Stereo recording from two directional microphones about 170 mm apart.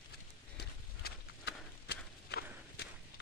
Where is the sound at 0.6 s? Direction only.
70° left (ahead or behind).